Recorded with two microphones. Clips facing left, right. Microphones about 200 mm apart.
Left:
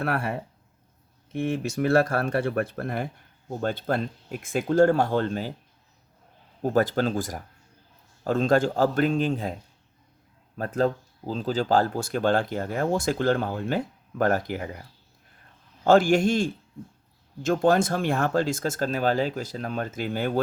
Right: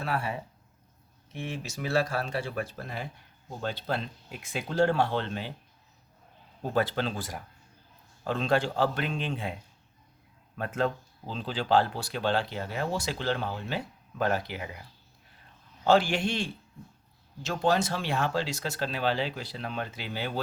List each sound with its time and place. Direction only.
0.0 s speech: 60° left (ahead or behind); by 5.5 s 40° left (ahead or behind)
6.6 s speech: 45° left (ahead or behind)